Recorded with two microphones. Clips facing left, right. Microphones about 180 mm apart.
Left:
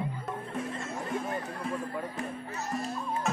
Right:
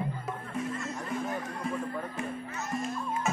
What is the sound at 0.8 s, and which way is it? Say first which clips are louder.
Music: left 1 dB; 30° left (ahead or behind).